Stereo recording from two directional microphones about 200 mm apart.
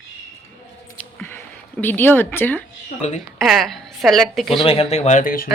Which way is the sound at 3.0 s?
35° left (ahead or behind).